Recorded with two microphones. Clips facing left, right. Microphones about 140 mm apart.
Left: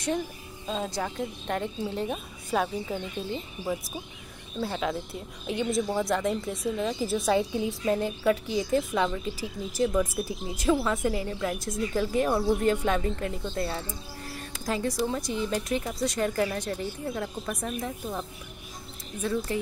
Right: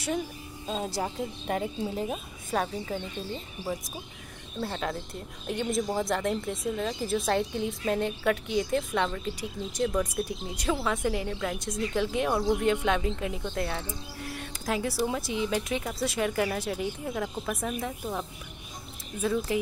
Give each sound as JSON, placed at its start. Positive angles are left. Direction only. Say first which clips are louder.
{"t": 0.8, "sound": "speech", "louder": "even", "side_deg": -30}
{"t": 1.5, "sound": "speech", "louder": "right 1 dB", "side_deg": -5}
{"t": 4.6, "sound": "speech", "louder": "left 2 dB", "side_deg": 5}
{"t": 13.4, "sound": "speech", "louder": "left 1 dB", "side_deg": 10}
{"t": 19.2, "sound": "speech", "louder": "right 1 dB", "side_deg": -5}